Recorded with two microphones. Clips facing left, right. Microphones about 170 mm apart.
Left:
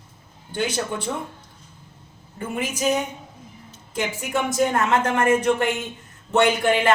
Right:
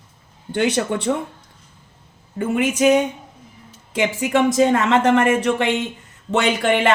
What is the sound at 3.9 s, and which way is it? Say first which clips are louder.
Speech: right 6 dB; 90° right.